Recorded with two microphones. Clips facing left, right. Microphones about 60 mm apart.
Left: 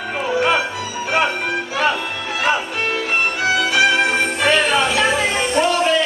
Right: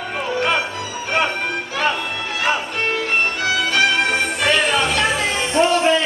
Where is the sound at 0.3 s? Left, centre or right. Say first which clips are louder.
Left 3 dB; centre.